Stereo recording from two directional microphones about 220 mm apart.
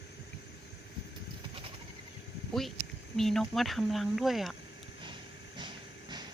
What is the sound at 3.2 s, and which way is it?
Speech, centre (ahead or behind).